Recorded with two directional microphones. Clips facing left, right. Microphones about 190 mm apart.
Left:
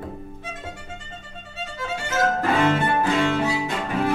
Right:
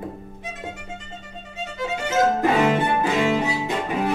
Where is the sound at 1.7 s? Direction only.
20° right (ahead or behind).